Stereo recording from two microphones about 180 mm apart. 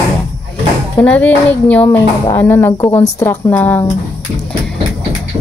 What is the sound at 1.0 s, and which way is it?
Speech, 10° left (ahead or behind).